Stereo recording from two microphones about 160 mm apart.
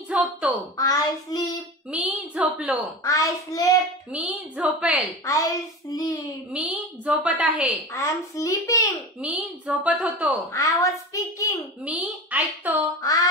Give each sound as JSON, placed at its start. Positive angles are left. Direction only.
{"t": 0.1, "sound": "a sound", "side_deg": -5}
{"t": 0.7, "sound": "a child's voice", "side_deg": 25}
{"t": 1.9, "sound": "a woman's voice", "side_deg": -5}
{"t": 3.0, "sound": "a child's voice", "side_deg": 20}
{"t": 4.1, "sound": "a woman's voice", "side_deg": -10}
{"t": 5.2, "sound": "a child's voice", "side_deg": 20}
{"t": 6.5, "sound": "a woman's voice", "side_deg": -5}
{"t": 7.9, "sound": "a child's voice", "side_deg": 20}
{"t": 9.2, "sound": "a woman's voice", "side_deg": -10}
{"t": 10.5, "sound": "a child's voice", "side_deg": 20}
{"t": 11.8, "sound": "a woman's voice", "side_deg": -10}
{"t": 13.0, "sound": "a child's voice", "side_deg": 25}